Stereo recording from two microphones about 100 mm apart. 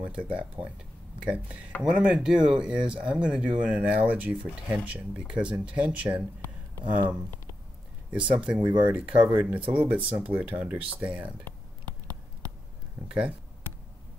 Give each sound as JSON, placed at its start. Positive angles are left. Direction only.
{"t": 0.6, "sound": "speech", "side_deg": -60}
{"t": 1.2, "sound": "speech", "side_deg": -15}